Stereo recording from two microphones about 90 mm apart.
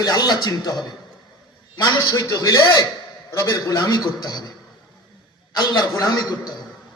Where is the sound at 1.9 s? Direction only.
40° left (ahead or behind).